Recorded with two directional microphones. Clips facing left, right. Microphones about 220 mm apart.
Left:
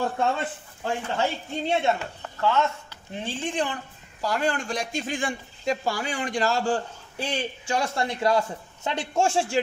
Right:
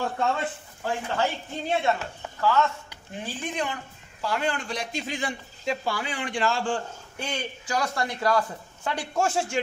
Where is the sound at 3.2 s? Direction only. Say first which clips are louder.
Left 3 dB; 25° left (ahead or behind).